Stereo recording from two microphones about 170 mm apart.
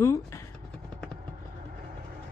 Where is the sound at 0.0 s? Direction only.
15° left (ahead or behind).